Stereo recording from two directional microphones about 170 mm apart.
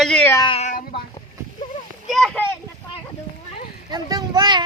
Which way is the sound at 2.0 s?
Centre (ahead or behind).